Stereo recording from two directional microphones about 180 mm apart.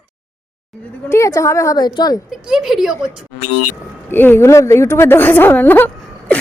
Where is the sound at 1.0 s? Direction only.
15° left (ahead or behind).